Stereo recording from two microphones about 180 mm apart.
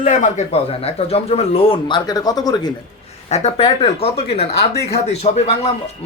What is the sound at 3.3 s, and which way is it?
Speech, 40° left (ahead or behind).